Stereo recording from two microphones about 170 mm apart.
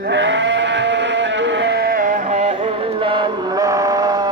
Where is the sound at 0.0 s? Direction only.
90° right.